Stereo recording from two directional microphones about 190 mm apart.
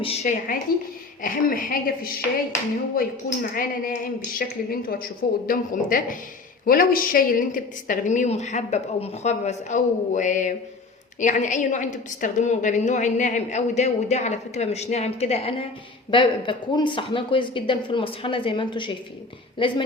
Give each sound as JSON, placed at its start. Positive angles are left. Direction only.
{"t": 0.0, "sound": "a woman's voice", "side_deg": 35}